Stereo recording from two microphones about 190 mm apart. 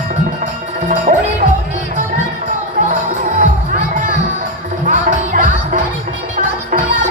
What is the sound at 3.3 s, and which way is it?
Music, 45° right (ahead or behind).